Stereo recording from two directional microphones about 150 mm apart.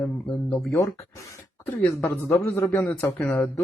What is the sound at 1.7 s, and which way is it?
Speech, 20° left (ahead or behind).